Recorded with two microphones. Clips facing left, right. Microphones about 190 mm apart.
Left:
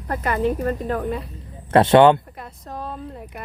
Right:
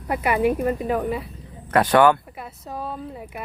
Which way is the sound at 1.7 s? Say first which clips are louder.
Left 4 dB; 25° left (ahead or behind).